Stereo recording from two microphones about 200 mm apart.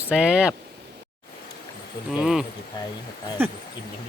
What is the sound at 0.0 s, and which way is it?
Speech, 5° right (ahead or behind).